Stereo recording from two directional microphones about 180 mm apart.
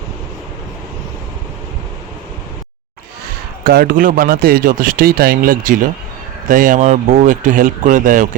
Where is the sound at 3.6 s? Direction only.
60° right (ahead or behind).